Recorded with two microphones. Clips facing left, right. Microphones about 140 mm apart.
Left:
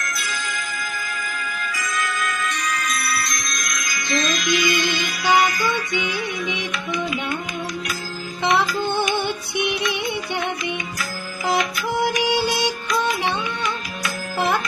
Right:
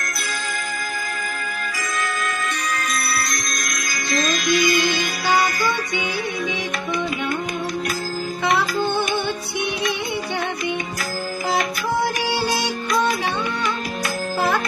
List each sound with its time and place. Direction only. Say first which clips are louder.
0.2 s music: right 1 dB; 40° right (ahead or behind)
1.6 s music: even; 45° right (ahead or behind)
12.0 s music: left 2 dB; 15° left (ahead or behind)